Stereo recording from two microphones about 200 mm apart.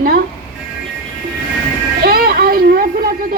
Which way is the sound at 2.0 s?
50° right (ahead or behind).